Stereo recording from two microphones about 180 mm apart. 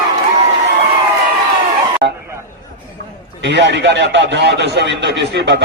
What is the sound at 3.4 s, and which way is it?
A man's voice, 75° right (ahead or behind).